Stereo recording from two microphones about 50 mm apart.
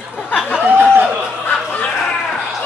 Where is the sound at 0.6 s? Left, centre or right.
Right.